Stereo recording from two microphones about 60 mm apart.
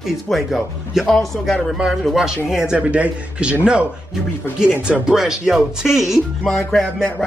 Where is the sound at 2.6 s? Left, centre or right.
Right.